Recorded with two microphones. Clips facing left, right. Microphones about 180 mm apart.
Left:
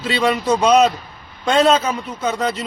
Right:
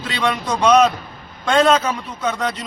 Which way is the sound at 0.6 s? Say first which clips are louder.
Right 2 dB; 25° left (ahead or behind).